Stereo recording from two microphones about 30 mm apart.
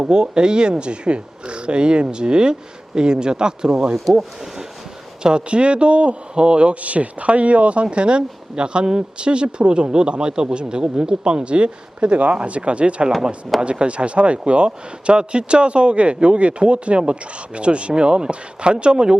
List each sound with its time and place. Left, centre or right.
0.0 s speech: right
3.9 s speech: centre
5.2 s speech: right
6.8 s speech: right